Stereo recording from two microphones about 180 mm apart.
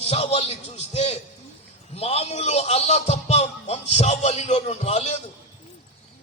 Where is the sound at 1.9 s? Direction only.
35° left (ahead or behind).